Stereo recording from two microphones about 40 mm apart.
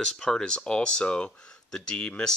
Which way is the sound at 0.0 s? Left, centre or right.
Centre.